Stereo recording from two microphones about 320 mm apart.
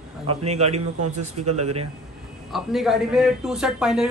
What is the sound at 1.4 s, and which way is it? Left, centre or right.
Speech, right.